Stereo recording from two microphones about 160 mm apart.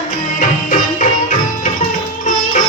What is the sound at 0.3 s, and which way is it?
Music, 50° left (ahead or behind).